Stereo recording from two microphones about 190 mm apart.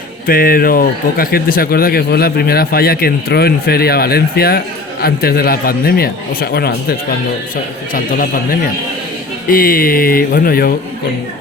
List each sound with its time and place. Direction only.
0.3 s speech: 50° left (ahead or behind)